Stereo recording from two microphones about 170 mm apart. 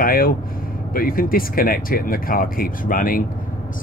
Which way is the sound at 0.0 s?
60° left (ahead or behind).